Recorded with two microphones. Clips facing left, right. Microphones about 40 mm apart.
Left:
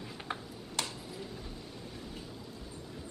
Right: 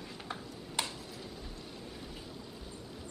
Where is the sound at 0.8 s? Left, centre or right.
Centre.